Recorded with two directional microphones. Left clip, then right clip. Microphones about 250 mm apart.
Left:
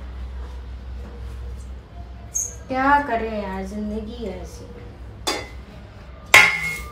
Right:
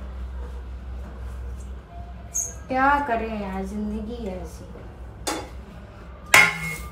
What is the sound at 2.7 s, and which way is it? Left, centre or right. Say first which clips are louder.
A woman's voice: left 2 dB; centre.